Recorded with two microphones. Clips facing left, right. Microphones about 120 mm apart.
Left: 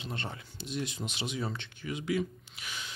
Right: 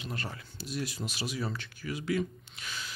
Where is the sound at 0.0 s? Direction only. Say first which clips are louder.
Even; 25° left (ahead or behind).